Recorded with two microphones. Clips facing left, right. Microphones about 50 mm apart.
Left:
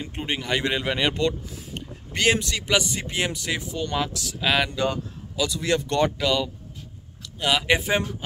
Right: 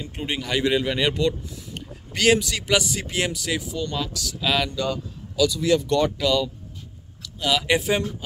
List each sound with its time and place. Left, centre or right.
0.2 s speech: centre
4.7 s speech: left
5.9 s speech: centre
7.7 s speech: centre